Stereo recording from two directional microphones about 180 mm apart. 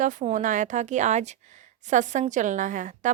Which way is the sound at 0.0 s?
45° right (ahead or behind).